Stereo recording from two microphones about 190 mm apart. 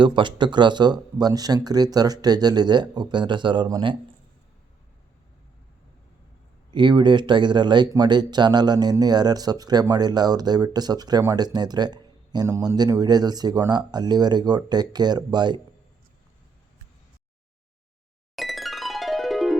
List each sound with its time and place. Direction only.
0.0 s speech: 25° right (ahead or behind)
6.7 s speech: 25° right (ahead or behind)
18.3 s music: centre (ahead or behind)